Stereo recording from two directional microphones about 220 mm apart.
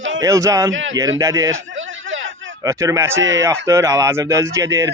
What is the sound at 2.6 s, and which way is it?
Speech, 15° right (ahead or behind).